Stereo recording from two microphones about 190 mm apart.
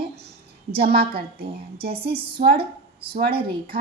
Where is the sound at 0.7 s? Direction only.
55° right (ahead or behind).